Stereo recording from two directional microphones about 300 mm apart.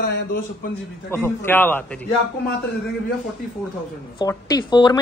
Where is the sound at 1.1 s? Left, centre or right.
Centre.